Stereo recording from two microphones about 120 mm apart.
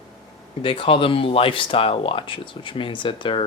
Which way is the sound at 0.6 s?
45° left (ahead or behind).